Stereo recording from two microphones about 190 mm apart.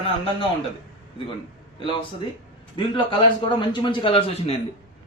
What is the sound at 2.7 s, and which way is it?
A man's voice, 25° left (ahead or behind).